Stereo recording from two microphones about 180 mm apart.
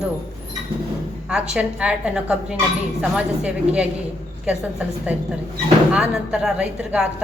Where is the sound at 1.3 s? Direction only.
5° right (ahead or behind).